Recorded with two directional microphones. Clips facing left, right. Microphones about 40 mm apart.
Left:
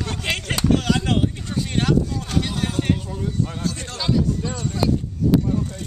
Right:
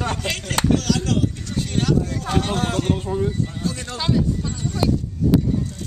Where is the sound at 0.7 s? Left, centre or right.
Left.